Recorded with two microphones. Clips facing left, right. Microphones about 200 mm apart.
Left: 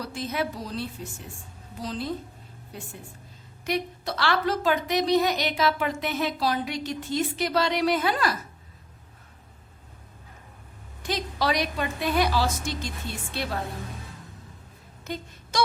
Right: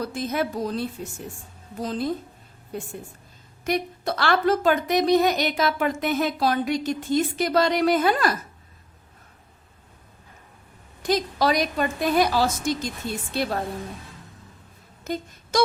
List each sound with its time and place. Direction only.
0.0 s a woman's voice: 50° right (ahead or behind)
11.0 s a woman's voice: 45° right (ahead or behind)
15.0 s speech: 45° right (ahead or behind)